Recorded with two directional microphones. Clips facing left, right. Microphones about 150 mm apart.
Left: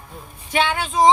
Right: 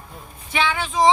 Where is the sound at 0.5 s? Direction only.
45° left (ahead or behind).